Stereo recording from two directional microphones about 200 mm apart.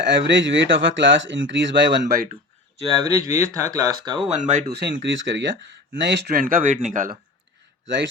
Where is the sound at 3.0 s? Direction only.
15° right (ahead or behind).